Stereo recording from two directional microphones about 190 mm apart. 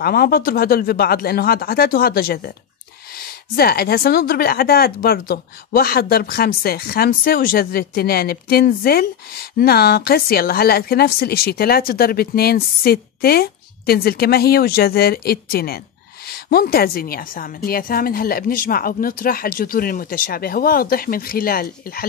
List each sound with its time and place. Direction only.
0.0 s speech: 55° left (ahead or behind)